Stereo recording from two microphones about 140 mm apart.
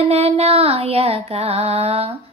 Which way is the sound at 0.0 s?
45° right (ahead or behind).